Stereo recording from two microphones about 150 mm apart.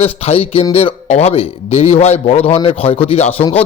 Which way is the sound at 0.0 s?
40° left (ahead or behind).